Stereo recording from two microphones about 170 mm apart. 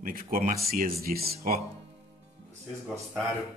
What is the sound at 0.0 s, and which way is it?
Speech, 55° right (ahead or behind).